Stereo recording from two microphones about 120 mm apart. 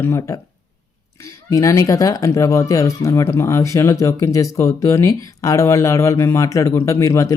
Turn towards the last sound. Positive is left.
turn(degrees=25)  # may be behind; listen again after turning